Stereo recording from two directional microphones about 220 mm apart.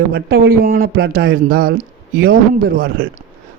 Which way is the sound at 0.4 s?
40° right (ahead or behind).